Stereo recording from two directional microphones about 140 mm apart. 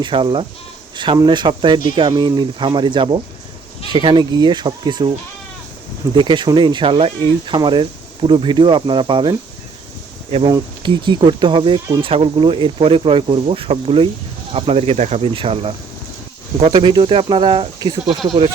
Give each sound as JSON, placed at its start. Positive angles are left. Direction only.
{"t": 0.0, "sound": "speech", "side_deg": -35}
{"t": 6.1, "sound": "speech", "side_deg": -35}
{"t": 10.4, "sound": "speech", "side_deg": -35}
{"t": 16.7, "sound": "speech", "side_deg": -35}